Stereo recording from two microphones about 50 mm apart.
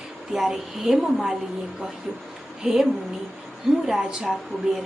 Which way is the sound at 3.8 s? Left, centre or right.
Centre.